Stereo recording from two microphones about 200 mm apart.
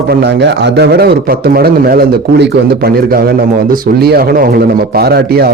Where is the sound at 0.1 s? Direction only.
55° right (ahead or behind).